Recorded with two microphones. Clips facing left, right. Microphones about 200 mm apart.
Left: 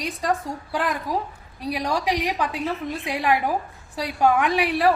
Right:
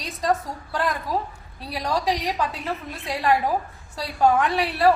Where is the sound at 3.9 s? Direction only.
15° left (ahead or behind).